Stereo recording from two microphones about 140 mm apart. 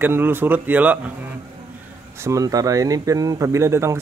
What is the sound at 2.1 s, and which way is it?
Speech, 20° right (ahead or behind).